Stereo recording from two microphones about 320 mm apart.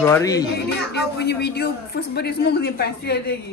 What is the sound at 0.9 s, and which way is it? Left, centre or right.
A man's voice, left.